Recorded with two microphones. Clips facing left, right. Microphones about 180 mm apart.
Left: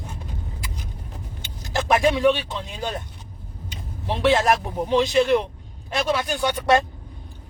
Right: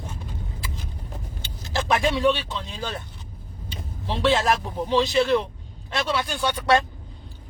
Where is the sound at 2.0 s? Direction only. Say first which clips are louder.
Left 3 dB; 15° left (ahead or behind).